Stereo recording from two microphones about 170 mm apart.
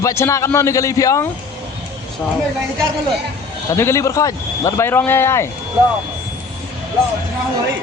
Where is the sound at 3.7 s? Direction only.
15° left (ahead or behind).